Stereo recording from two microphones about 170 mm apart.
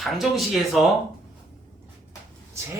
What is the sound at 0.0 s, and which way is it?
Speech, centre (ahead or behind).